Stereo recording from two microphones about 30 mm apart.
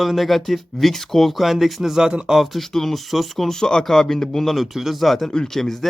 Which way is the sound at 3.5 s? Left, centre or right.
Left.